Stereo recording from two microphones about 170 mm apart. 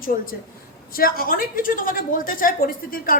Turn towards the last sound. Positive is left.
turn(degrees=55)  # may be behind; listen again after turning